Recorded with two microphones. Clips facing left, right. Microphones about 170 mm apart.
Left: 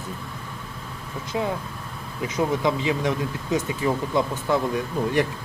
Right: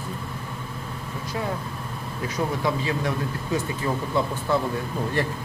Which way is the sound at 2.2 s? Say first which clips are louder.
Left 3 dB; 20° left (ahead or behind).